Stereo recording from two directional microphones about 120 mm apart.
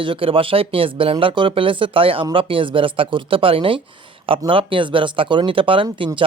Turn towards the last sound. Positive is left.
turn(degrees=-45)  # may be behind; listen again after turning